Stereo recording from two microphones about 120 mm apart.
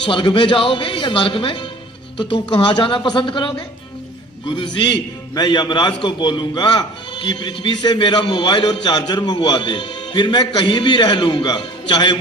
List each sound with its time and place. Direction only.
0.0 s a man's voice: 40° left (ahead or behind)
4.5 s a man's voice: 40° left (ahead or behind)